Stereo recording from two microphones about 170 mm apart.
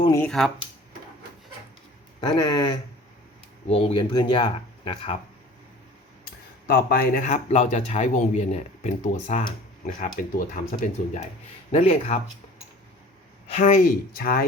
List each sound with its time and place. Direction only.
0.3 s speech: centre (ahead or behind)
2.2 s speech: 25° left (ahead or behind)
6.7 s speech: 60° left (ahead or behind); by 9.4 s 40° left (ahead or behind)
9.8 s speech: 55° left (ahead or behind)
11.7 s speech: 40° left (ahead or behind)
13.5 s speech: 40° left (ahead or behind)
14.1 s speech: 60° left (ahead or behind)